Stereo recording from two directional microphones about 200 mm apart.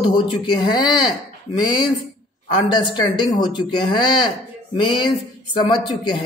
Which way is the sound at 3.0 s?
20° left (ahead or behind).